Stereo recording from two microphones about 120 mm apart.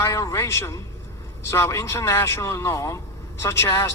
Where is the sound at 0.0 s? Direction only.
25° left (ahead or behind).